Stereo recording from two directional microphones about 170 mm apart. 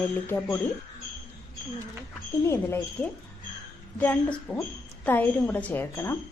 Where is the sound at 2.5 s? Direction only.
15° left (ahead or behind).